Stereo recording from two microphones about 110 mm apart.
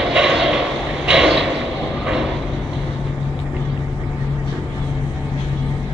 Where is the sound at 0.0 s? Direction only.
5° right (ahead or behind).